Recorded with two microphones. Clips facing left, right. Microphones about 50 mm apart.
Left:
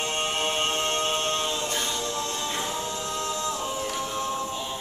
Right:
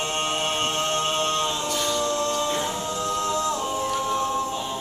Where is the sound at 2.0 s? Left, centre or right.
Right.